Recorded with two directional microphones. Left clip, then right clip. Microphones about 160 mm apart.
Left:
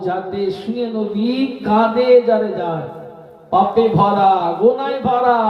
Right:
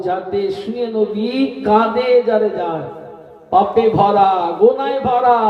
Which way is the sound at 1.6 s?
20° right (ahead or behind).